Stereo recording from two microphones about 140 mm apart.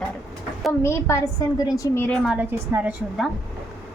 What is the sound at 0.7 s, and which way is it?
A woman's voice, 20° left (ahead or behind).